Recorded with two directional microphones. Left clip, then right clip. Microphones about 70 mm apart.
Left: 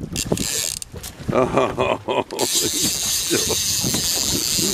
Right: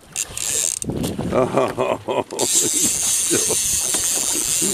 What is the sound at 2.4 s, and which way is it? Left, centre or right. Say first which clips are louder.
Squeal: even; left.